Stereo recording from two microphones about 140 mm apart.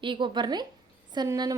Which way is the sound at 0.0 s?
35° right (ahead or behind).